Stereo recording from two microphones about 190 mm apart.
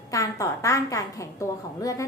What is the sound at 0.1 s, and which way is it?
A woman's voice, 15° left (ahead or behind).